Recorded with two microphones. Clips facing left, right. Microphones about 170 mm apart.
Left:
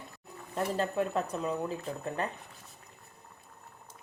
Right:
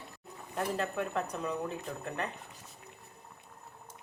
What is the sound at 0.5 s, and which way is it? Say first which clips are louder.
Speech: left 3 dB; 30° left (ahead or behind).